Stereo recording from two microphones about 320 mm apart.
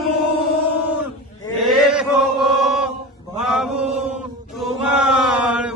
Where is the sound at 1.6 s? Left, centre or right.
Centre.